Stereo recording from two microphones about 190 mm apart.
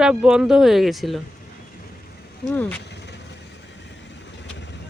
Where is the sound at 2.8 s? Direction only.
65° left (ahead or behind).